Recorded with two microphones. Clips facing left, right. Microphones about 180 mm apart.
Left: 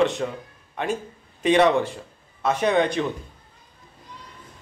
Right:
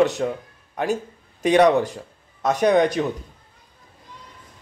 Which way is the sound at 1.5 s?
40° right (ahead or behind).